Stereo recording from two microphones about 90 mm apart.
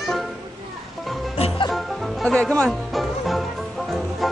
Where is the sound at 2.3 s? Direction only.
10° left (ahead or behind).